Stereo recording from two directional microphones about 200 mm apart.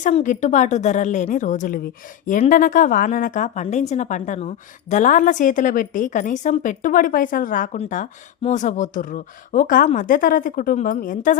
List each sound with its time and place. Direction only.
0.0 s a woman's voice: 40° left (ahead or behind)